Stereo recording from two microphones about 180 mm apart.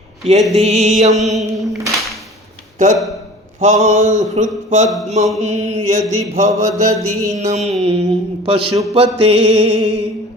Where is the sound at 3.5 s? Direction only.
40° right (ahead or behind).